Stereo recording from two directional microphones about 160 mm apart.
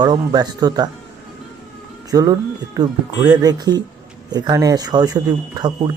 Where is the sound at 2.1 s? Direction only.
20° right (ahead or behind).